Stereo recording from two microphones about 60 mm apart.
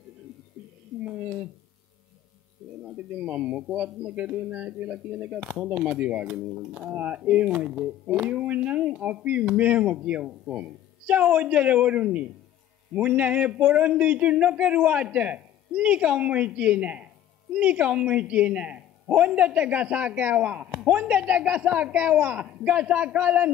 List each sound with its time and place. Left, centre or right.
1.0 s a man's voice: right
2.8 s a man's voice: right